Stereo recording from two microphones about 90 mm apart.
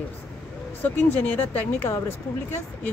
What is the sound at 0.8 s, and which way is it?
Speech, 20° left (ahead or behind).